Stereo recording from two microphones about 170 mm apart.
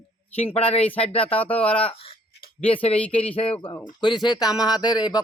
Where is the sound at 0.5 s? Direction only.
35° left (ahead or behind).